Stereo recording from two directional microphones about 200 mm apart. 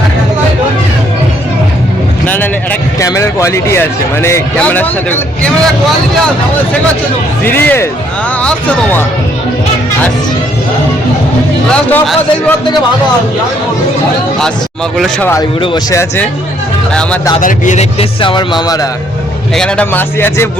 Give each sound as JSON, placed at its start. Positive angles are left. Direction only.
{"t": 2.2, "sound": "vehicle", "side_deg": 10}
{"t": 3.0, "sound": "speech", "side_deg": 15}
{"t": 7.4, "sound": "speech", "side_deg": 10}
{"t": 11.7, "sound": "speech", "side_deg": 5}
{"t": 14.9, "sound": "speech", "side_deg": 0}
{"t": 15.6, "sound": "speech", "side_deg": 20}
{"t": 16.9, "sound": "speech", "side_deg": 5}
{"t": 17.4, "sound": "speech", "side_deg": 40}
{"t": 18.2, "sound": "speech", "side_deg": 25}
{"t": 19.5, "sound": "speech", "side_deg": 5}